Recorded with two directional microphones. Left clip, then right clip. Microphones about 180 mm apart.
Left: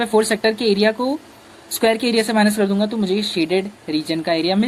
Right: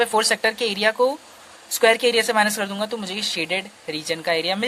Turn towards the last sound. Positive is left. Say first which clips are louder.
# left 3 dB
turn(degrees=-40)  # may be behind; listen again after turning